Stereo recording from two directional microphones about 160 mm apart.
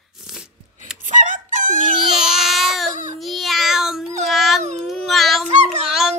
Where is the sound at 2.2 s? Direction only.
Centre (ahead or behind).